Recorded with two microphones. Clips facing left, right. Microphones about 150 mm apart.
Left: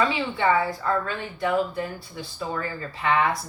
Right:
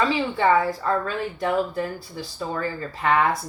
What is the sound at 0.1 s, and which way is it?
Speech, 40° right (ahead or behind).